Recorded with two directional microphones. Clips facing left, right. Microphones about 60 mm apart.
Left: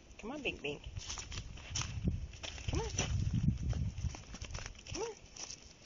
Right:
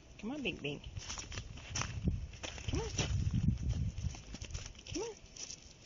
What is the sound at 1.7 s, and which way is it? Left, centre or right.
Walk, right.